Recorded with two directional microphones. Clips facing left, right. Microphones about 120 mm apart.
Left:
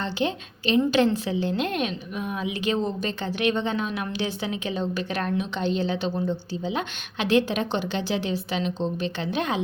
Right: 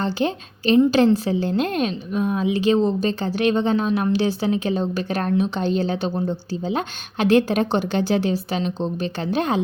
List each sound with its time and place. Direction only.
0.0 s a woman's voice: 40° right (ahead or behind)